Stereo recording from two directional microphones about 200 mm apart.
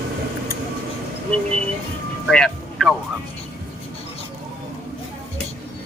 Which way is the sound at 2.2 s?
Centre (ahead or behind).